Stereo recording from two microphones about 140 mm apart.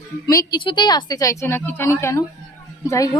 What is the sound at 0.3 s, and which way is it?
Speech, 25° left (ahead or behind).